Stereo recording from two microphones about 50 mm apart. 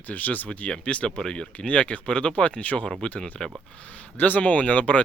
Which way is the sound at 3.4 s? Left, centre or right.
Centre.